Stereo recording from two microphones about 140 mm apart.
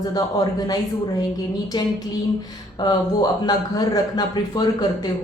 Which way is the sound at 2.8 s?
30° left (ahead or behind).